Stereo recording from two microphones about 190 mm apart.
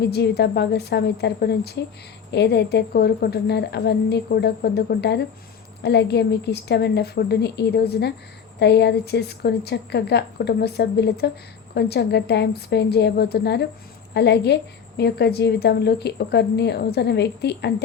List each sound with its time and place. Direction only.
0.1 s a woman's voice: 60° left (ahead or behind)